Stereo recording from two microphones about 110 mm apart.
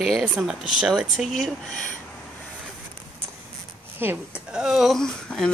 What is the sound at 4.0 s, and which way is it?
Speech, 20° right (ahead or behind).